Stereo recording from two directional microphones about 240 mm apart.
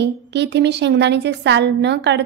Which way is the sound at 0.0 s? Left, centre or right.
Right.